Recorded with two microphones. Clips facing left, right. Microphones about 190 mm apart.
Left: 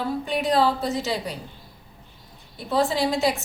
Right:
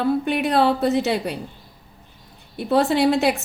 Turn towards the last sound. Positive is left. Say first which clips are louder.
# right 5 dB
turn(degrees=-65)  # may be behind; listen again after turning